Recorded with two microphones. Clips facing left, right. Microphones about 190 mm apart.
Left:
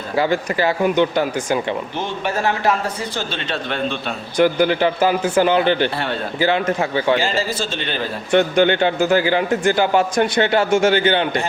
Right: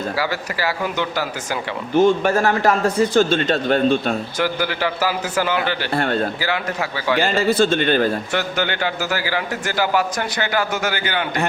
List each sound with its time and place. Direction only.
0.2 s a man's voice: 20° left (ahead or behind)
2.0 s a man's voice: 45° right (ahead or behind)
4.4 s a man's voice: 20° left (ahead or behind)
7.2 s speech: 60° right (ahead or behind)
8.3 s a man's voice: 20° left (ahead or behind)